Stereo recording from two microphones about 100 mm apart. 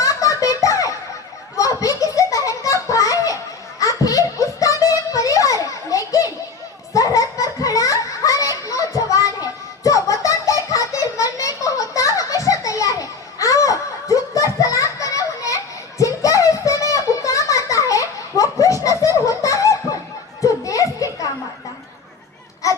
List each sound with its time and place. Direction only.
0.0 s a sound: 35° left (ahead or behind)
20.4 s children playing: 35° left (ahead or behind)
22.6 s baby cry: 35° left (ahead or behind)